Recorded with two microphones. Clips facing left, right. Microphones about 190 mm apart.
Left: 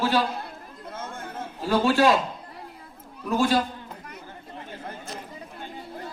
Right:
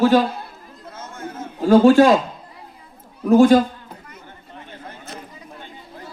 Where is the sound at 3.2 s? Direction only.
45° right (ahead or behind).